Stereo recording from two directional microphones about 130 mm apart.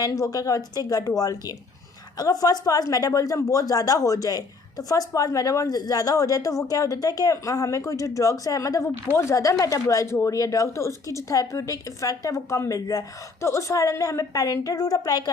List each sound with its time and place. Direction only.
0.0 s a woman's voice: 25° left (ahead or behind)